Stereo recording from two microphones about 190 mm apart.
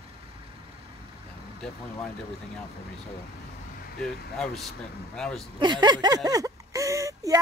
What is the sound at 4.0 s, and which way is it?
Speech, centre (ahead or behind).